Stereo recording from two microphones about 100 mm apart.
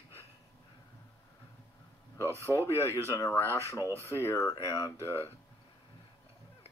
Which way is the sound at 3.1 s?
30° left (ahead or behind).